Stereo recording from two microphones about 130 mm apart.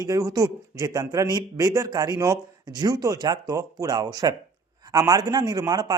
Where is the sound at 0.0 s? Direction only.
25° right (ahead or behind).